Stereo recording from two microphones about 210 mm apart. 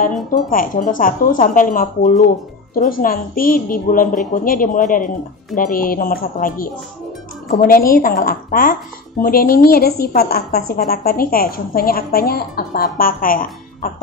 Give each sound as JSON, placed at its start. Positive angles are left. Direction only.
{"t": 0.0, "sound": "a woman's voice", "side_deg": 40}